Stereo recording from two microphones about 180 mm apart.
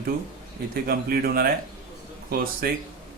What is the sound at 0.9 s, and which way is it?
Speech, 55° right (ahead or behind).